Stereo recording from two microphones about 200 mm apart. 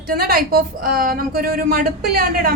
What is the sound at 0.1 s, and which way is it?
A woman's voice, 50° right (ahead or behind).